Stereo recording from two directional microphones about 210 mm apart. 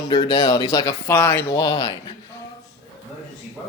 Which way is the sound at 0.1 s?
20° left (ahead or behind).